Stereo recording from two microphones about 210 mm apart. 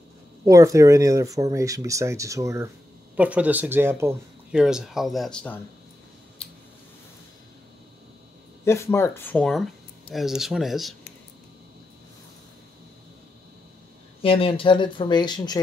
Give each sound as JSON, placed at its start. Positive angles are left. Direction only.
{"t": 0.5, "sound": "speech", "side_deg": -15}
{"t": 8.6, "sound": "speech", "side_deg": 10}
{"t": 14.2, "sound": "speech", "side_deg": 25}